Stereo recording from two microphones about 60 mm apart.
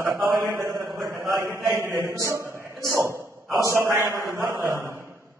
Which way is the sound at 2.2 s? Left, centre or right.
Right.